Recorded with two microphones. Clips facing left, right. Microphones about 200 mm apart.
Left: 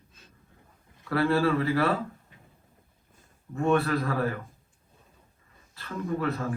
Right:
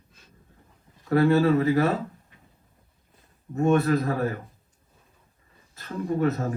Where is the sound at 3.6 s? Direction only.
40° right (ahead or behind).